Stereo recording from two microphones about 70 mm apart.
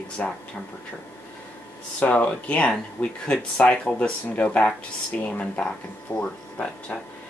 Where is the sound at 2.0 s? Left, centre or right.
Centre.